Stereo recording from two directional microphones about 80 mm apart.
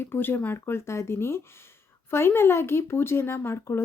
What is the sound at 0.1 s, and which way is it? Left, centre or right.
Speech, left.